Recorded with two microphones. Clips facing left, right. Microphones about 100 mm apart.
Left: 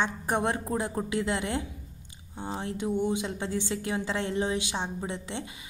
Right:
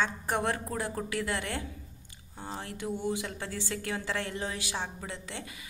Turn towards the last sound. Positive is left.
turn(degrees=20)  # may be behind; listen again after turning